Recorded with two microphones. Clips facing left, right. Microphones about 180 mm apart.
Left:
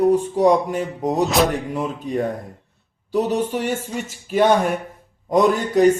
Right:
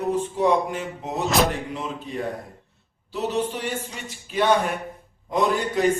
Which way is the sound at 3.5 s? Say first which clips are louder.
Left 7 dB; 45° left (ahead or behind).